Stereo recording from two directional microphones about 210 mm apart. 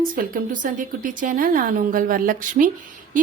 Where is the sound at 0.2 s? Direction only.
40° right (ahead or behind).